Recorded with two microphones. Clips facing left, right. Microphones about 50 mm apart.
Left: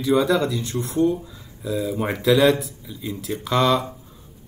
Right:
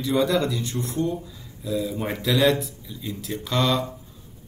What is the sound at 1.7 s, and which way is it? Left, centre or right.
Speech, left.